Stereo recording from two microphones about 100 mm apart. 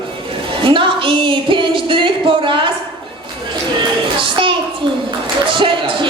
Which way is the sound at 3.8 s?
55° right (ahead or behind).